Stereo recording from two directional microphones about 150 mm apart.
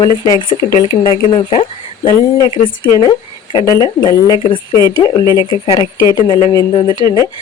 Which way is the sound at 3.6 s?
20° left (ahead or behind).